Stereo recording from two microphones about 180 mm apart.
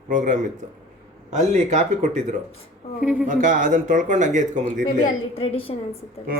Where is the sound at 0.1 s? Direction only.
45° right (ahead or behind).